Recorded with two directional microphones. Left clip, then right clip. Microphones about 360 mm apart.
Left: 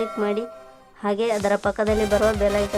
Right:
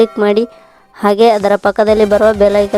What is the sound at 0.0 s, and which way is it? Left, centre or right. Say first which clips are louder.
Speech: right 13 dB; right.